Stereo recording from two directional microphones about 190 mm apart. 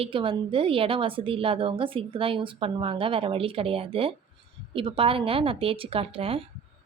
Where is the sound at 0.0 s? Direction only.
30° right (ahead or behind).